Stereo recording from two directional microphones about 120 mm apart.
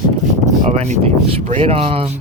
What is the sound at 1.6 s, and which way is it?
Speech, 50° right (ahead or behind).